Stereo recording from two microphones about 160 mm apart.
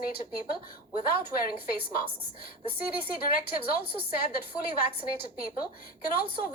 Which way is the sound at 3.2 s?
65° left (ahead or behind).